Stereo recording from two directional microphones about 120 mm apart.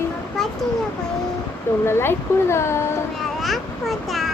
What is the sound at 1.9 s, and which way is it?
Speech, 20° left (ahead or behind).